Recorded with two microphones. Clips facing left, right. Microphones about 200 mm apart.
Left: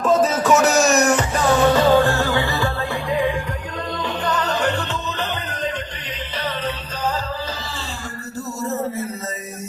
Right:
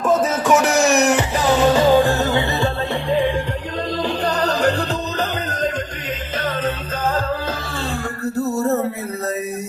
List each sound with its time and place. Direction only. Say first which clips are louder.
0.0 s a sound: even; 10° right (ahead or behind)
0.9 s music: right 1 dB; 20° right (ahead or behind); by 4.9 s 35° right (ahead or behind)
8.4 s music: right 6 dB; 60° right (ahead or behind)